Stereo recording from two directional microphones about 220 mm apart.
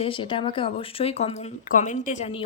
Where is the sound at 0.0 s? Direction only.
25° left (ahead or behind).